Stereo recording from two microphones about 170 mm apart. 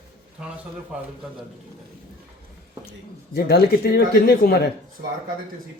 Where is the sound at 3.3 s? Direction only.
65° left (ahead or behind).